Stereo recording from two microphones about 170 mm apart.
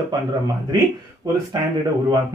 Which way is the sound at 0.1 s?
25° right (ahead or behind).